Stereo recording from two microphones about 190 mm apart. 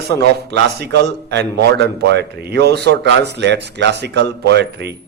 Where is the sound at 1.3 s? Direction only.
60° right (ahead or behind).